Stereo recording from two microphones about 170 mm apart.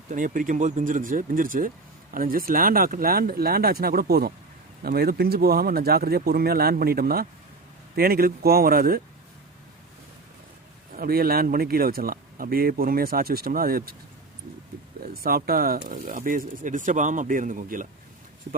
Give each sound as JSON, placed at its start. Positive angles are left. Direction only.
{"t": 0.1, "sound": "speech", "side_deg": -50}
{"t": 10.9, "sound": "speech", "side_deg": -60}
{"t": 15.0, "sound": "speech", "side_deg": -60}